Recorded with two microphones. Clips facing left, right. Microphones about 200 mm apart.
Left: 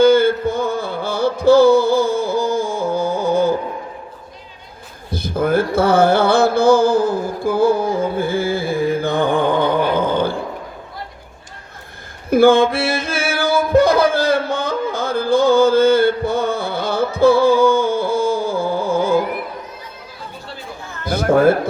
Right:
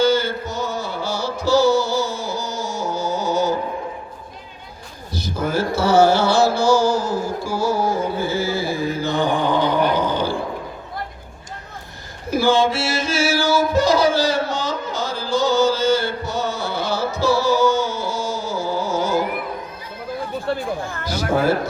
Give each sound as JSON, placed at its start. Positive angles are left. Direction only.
{"t": 0.0, "sound": "music", "side_deg": 55}
{"t": 5.1, "sound": "speech", "side_deg": 55}
{"t": 12.3, "sound": "music", "side_deg": 55}
{"t": 20.5, "sound": "chatter", "side_deg": -55}
{"t": 21.0, "sound": "a man's voice", "side_deg": 55}